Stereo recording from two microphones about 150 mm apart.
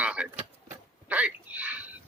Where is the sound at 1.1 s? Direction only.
10° right (ahead or behind).